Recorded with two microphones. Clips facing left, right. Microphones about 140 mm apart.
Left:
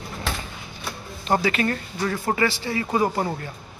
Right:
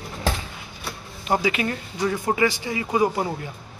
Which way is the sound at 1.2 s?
10° right (ahead or behind).